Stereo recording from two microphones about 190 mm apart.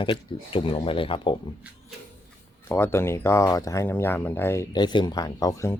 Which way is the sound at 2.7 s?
15° left (ahead or behind).